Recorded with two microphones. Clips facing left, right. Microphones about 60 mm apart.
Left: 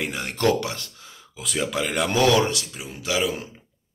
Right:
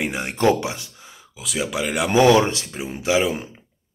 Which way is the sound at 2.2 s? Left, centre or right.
Right.